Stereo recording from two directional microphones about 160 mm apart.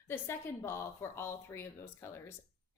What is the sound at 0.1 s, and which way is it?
A woman's voice, 15° left (ahead or behind).